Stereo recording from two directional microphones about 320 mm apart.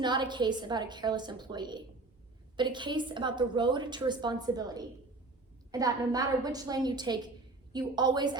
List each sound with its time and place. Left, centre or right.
0.0 s a woman's voice: centre